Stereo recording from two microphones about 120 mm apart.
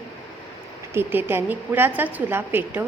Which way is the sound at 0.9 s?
20° right (ahead or behind).